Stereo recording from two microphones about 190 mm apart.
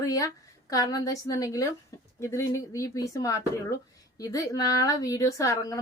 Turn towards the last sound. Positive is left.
turn(degrees=15)  # may be behind; listen again after turning